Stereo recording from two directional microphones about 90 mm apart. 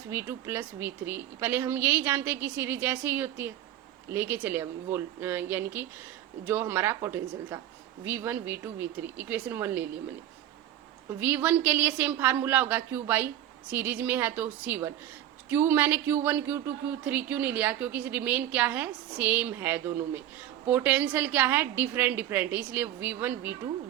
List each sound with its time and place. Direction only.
0.1 s speech: 25° right (ahead or behind)
11.2 s speech: 20° right (ahead or behind)